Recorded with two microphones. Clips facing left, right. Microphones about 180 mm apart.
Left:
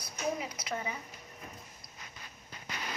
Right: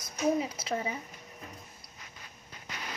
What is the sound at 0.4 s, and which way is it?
Speech, 30° right (ahead or behind).